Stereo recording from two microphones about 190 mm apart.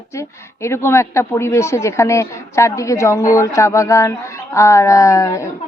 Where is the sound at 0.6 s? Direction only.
15° left (ahead or behind).